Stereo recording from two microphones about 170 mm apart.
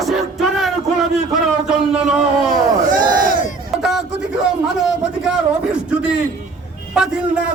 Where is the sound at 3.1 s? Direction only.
55° right (ahead or behind).